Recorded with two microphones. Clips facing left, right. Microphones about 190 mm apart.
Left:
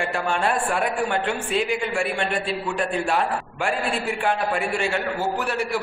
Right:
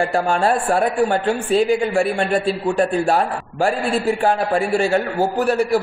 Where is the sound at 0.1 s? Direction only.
40° right (ahead or behind).